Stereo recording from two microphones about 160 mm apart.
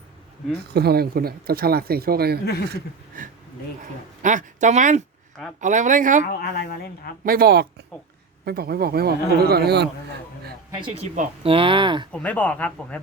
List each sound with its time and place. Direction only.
0.6 s speech: 90° right; by 2.4 s 75° right (ahead or behind)
2.4 s speech: 80° left
3.1 s speech: 55° right (ahead or behind)
6.2 s speech: 75° left (ahead or behind)
7.3 s speech: 75° right (ahead or behind); by 9.9 s 90° right
10.8 s speech: 30° right (ahead or behind)
11.0 s speech: 50° right (ahead or behind)
11.4 s speech: 35° right (ahead or behind)
12.1 s speech: 10° left (ahead or behind)